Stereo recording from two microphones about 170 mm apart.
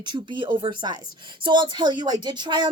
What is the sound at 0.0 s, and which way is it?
A woman's voice, 30° right (ahead or behind).